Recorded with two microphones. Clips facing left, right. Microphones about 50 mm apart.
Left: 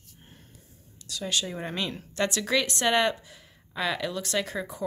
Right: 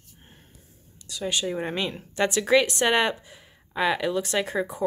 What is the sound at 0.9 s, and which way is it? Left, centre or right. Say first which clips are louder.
A woman's voice: right 2 dB; centre.